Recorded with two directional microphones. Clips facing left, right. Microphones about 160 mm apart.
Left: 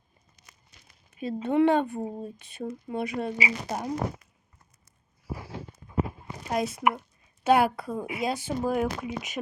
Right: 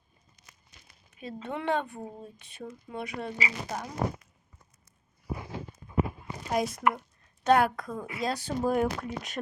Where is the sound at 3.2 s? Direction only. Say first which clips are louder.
Left 4 dB; 15° left (ahead or behind).